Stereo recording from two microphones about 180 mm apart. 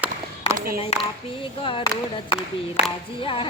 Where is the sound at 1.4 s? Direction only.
30° left (ahead or behind).